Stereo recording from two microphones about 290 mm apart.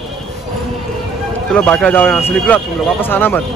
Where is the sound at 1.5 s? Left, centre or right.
Centre.